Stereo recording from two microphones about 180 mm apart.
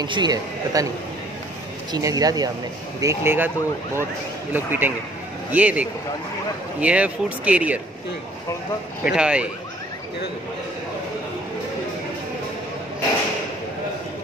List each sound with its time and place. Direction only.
0.0 s a man's voice: 25° right (ahead or behind)
1.9 s a man's voice: 20° right (ahead or behind)
9.0 s speech: 5° right (ahead or behind)